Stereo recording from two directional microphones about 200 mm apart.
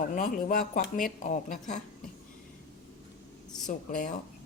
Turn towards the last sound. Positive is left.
turn(degrees=40)  # may be behind; listen again after turning